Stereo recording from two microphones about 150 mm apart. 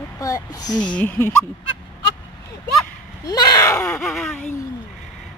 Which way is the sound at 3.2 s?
25° left (ahead or behind).